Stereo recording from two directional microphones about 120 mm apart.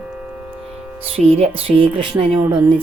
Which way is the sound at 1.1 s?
55° right (ahead or behind).